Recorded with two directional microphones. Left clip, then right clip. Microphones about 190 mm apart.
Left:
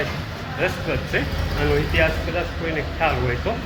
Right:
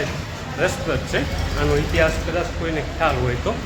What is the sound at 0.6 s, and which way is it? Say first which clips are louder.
Speech: right 2 dB; 20° right (ahead or behind).